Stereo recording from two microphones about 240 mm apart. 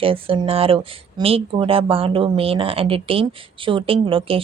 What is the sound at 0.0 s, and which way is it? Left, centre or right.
Speech, right.